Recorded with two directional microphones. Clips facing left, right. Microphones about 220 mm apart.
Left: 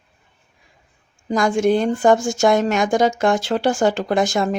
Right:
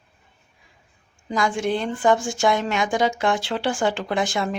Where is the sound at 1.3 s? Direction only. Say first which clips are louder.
Left 6 dB; 45° left (ahead or behind).